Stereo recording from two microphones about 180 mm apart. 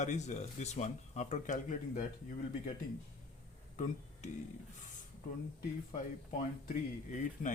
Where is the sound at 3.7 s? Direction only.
45° left (ahead or behind).